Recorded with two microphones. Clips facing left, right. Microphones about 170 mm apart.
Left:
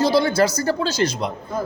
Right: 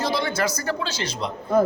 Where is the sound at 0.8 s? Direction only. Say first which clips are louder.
Left 7 dB; 40° left (ahead or behind).